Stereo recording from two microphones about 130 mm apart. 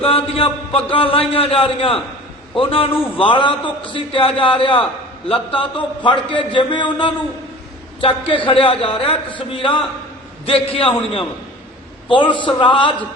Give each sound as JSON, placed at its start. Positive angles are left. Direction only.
{"t": 0.0, "sound": "a man's voice", "side_deg": 45}